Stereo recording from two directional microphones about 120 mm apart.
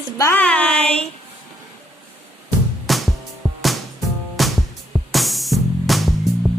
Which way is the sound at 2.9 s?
Centre (ahead or behind).